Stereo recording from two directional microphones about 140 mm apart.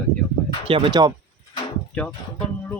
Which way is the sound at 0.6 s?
40° right (ahead or behind).